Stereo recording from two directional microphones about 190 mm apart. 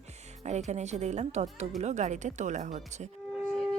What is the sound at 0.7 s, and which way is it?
Speech, 35° right (ahead or behind).